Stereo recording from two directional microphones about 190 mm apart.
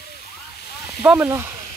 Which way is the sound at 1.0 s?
10° right (ahead or behind).